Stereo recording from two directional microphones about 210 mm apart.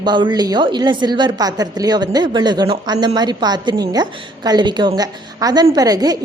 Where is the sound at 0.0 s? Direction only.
20° right (ahead or behind).